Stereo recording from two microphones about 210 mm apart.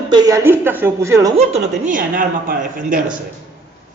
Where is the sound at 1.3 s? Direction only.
35° right (ahead or behind).